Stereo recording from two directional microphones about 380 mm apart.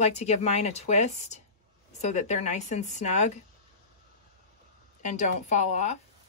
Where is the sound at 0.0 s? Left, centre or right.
Centre.